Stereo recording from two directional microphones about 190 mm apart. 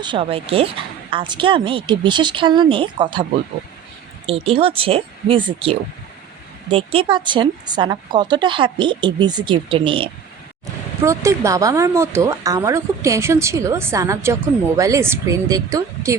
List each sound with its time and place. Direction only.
0.0 s speech: 25° right (ahead or behind)
4.3 s speech: 30° right (ahead or behind)
11.0 s speech: 15° right (ahead or behind)